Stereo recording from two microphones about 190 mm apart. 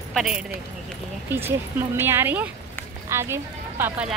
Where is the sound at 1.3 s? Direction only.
10° right (ahead or behind).